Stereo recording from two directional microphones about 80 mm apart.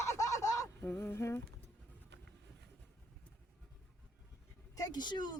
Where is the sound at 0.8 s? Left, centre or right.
Left.